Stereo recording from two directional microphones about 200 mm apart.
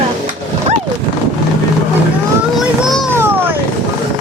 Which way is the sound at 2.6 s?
Centre (ahead or behind).